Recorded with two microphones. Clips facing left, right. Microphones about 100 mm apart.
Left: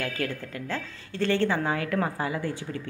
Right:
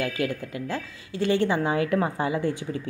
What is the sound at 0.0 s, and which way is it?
A woman's voice, 15° right (ahead or behind).